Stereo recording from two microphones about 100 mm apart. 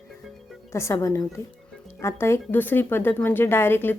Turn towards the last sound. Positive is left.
turn(degrees=20)  # may be behind; listen again after turning